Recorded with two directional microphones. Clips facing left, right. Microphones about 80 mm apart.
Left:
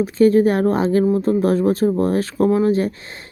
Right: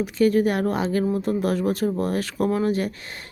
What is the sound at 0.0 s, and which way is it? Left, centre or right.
Speech, left.